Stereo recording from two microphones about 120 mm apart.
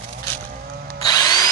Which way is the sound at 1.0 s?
30° left (ahead or behind).